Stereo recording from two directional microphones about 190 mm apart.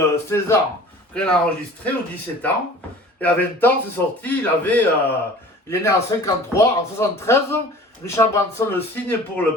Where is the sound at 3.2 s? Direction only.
10° left (ahead or behind).